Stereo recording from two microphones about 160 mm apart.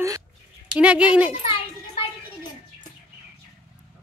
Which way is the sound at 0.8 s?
10° right (ahead or behind).